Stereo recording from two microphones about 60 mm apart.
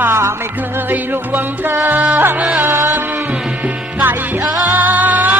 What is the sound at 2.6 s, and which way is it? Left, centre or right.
Music, right.